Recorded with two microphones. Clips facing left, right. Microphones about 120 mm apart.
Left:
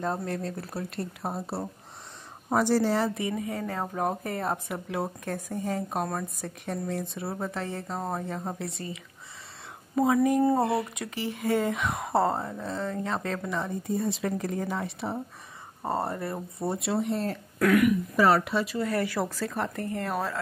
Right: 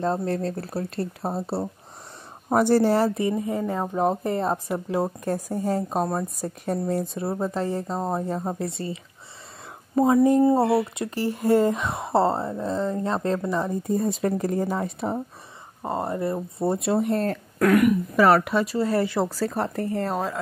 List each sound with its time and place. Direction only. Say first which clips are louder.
0.0 s speech: right 6 dB; 30° right (ahead or behind)
2.5 s a woman's voice: right 5 dB; 45° right (ahead or behind)
3.2 s speech: right 6 dB; 30° right (ahead or behind)
3.5 s a woman's voice: right 6 dB; 20° right (ahead or behind); by 15.1 s 45° right (ahead or behind)
15.8 s speech: right 3 dB; 20° right (ahead or behind)
16.5 s speech: right 5 dB; 35° right (ahead or behind)
16.9 s a woman's voice: right 5 dB; 55° right (ahead or behind)
18.1 s speech: right 6 dB; 60° right (ahead or behind)
18.7 s speech: right 5 dB; 30° right (ahead or behind)